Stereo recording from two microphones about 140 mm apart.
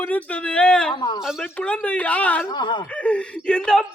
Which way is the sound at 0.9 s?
30° left (ahead or behind).